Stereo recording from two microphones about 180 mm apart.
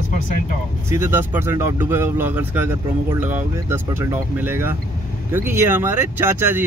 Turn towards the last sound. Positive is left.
turn(degrees=-10)  # may be behind; listen again after turning